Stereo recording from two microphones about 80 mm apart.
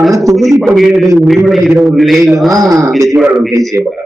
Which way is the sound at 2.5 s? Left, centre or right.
Right.